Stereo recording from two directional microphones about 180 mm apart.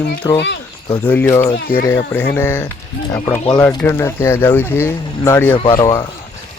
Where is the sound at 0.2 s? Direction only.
20° left (ahead or behind).